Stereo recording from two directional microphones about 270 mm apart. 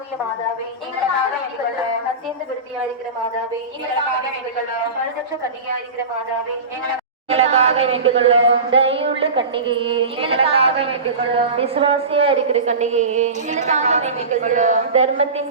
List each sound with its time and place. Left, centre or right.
7.3 s a woman's voice: right